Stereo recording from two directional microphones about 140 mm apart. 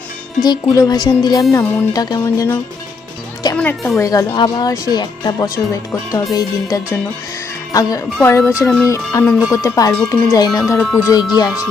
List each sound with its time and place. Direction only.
0.4 s speech: 25° left (ahead or behind)
1.5 s speech: 15° left (ahead or behind)
1.9 s speech: 25° left (ahead or behind)
11.2 s speech: 30° left (ahead or behind)